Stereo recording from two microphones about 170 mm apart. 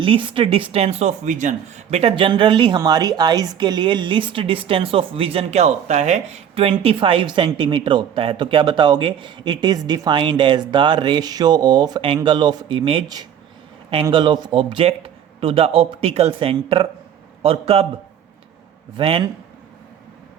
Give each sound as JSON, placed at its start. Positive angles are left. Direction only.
{"t": 0.0, "sound": "a man's voice", "side_deg": -30}
{"t": 18.9, "sound": "a man's voice", "side_deg": -30}